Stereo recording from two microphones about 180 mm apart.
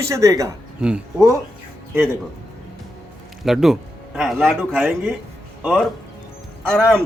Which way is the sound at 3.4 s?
Centre (ahead or behind).